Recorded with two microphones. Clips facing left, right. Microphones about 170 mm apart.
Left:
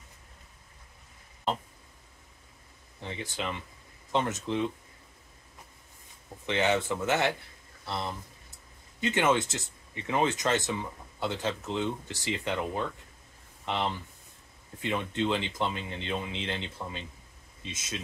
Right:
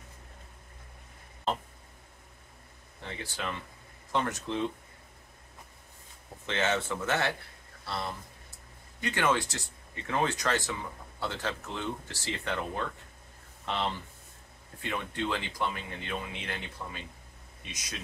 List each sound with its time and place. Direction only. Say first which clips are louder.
3.0 s speech: left 2 dB; 20° left (ahead or behind)
6.4 s speech: left 3 dB; 15° left (ahead or behind)